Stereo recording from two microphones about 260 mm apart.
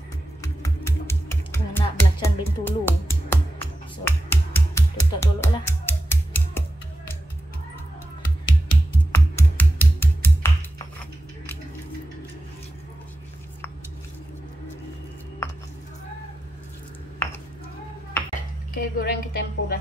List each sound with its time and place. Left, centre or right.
0.4 s typing: centre
4.0 s finger snapping: centre
8.6 s typing: centre
18.8 s a sound: left